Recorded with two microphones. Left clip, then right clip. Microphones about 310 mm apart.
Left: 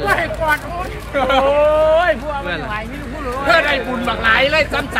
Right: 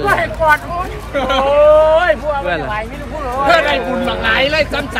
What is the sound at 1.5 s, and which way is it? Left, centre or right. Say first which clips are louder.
Speech: right 8 dB; right.